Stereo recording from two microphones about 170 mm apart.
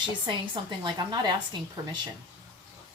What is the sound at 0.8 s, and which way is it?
Speech, 25° right (ahead or behind).